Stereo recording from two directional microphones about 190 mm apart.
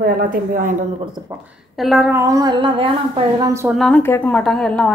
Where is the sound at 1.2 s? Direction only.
25° right (ahead or behind).